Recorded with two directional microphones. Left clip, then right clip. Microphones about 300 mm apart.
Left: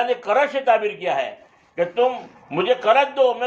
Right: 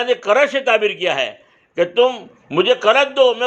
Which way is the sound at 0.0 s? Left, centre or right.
Right.